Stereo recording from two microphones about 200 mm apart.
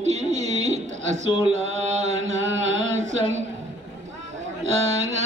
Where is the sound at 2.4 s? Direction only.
70° right (ahead or behind).